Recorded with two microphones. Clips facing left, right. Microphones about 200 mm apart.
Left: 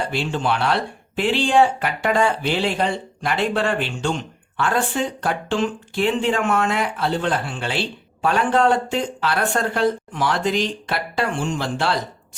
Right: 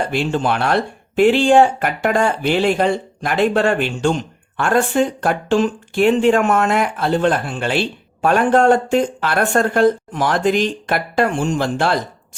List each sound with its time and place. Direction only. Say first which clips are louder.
0.1 s speech: right 4 dB; 45° right (ahead or behind)